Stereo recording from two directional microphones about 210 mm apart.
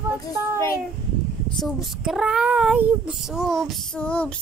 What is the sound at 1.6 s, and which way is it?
Child singing, 5° right (ahead or behind).